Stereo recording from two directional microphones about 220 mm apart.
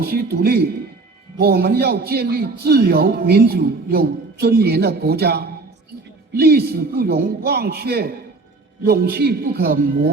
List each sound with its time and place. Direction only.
0.0 s a man's voice: 45° right (ahead or behind)